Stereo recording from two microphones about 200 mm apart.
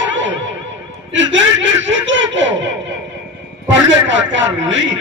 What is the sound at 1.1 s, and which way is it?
A man's voice, 65° right (ahead or behind).